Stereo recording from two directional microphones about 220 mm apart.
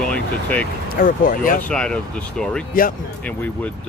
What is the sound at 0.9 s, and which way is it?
Speech, 40° left (ahead or behind).